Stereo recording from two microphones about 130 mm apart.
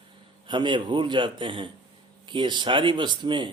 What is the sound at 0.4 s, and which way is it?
Speech, 40° right (ahead or behind).